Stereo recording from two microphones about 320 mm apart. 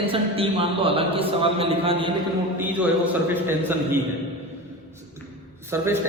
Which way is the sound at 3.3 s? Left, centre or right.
Centre.